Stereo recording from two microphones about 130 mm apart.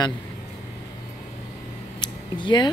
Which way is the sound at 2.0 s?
35° left (ahead or behind).